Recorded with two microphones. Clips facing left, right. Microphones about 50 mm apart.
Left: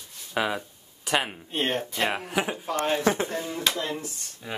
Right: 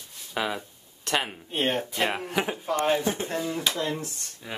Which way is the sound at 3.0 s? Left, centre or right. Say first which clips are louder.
Left 4 dB; left.